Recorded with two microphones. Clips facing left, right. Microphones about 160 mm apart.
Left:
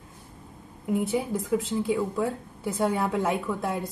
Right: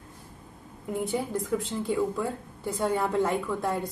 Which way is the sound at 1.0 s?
Centre (ahead or behind).